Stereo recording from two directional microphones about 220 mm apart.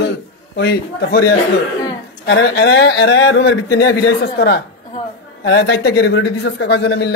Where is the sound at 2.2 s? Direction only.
45° left (ahead or behind).